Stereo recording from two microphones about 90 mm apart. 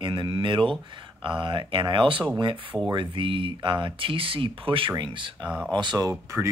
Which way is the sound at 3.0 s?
75° right (ahead or behind).